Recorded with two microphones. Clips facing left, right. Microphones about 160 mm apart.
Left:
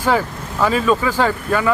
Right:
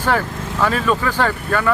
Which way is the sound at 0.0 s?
10° left (ahead or behind).